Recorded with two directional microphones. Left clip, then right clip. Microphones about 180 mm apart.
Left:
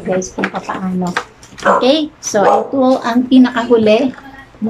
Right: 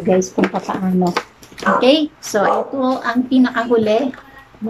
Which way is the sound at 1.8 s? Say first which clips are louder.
Right 3 dB; 10° right (ahead or behind).